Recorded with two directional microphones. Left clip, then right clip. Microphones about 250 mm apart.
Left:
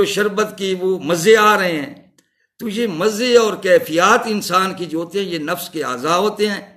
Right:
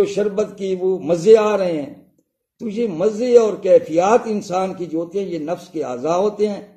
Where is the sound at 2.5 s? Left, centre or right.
Centre.